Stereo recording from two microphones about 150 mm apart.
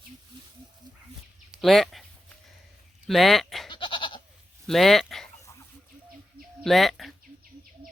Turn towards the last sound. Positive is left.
turn(degrees=0)  # may be behind; listen again after turning